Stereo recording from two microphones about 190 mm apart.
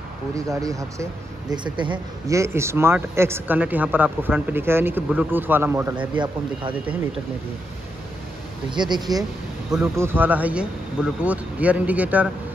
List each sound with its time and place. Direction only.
0.5 s speech: 15° right (ahead or behind)
6.1 s speech: 25° right (ahead or behind)
8.6 s speech: 25° right (ahead or behind)
9.7 s speech: 10° right (ahead or behind)